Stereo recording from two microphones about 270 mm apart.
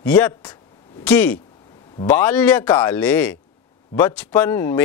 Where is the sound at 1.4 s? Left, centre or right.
Centre.